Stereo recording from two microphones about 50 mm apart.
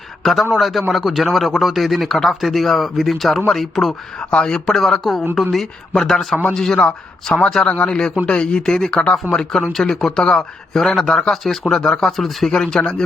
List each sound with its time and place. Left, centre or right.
0.2 s a man's voice: centre
4.2 s speech: left
7.7 s speech: left; by 12.5 s centre
12.5 s speech: centre